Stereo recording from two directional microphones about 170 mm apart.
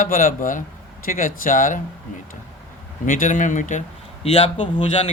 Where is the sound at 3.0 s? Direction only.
50° left (ahead or behind).